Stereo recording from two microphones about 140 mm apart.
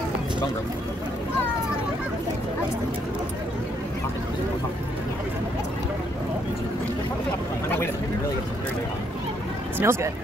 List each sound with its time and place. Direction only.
9.8 s speech: 20° right (ahead or behind)